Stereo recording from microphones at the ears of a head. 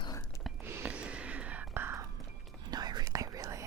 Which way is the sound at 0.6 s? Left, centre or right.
Right.